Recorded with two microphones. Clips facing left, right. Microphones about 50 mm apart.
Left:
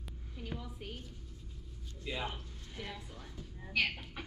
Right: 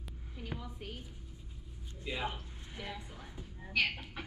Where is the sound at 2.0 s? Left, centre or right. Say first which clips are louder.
Right 1 dB; centre.